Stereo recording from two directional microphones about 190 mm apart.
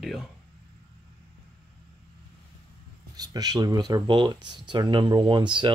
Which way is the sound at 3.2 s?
20° right (ahead or behind).